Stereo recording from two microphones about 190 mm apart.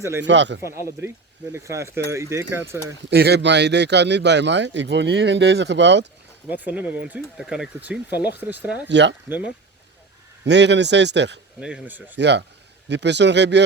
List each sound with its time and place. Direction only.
0.2 s speech: 70° right (ahead or behind)
0.6 s speech: 15° right (ahead or behind)
3.1 s a man's voice: 60° right (ahead or behind)
6.5 s speech: 10° right (ahead or behind)
8.1 s speech: 60° left (ahead or behind)
8.6 s speech: 10° right (ahead or behind)
8.9 s speech: 65° right (ahead or behind)
10.4 s a man's voice: 65° right (ahead or behind)
11.6 s speech: 5° right (ahead or behind)
12.1 s a man's voice: 65° right (ahead or behind)